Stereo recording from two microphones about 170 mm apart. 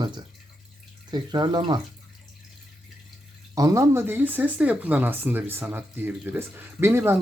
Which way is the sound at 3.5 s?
20° right (ahead or behind).